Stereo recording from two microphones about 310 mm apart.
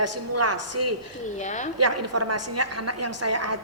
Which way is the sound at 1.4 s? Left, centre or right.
Left.